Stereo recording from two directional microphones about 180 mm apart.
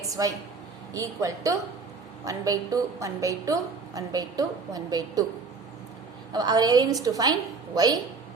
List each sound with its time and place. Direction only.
0.0 s a woman's voice: 20° right (ahead or behind)
6.3 s a woman's voice: 20° right (ahead or behind)